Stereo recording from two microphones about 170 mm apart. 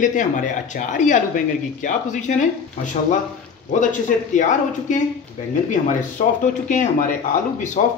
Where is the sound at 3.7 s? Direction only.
50° left (ahead or behind).